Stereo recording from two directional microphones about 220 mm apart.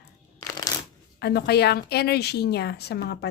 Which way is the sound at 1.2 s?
45° left (ahead or behind).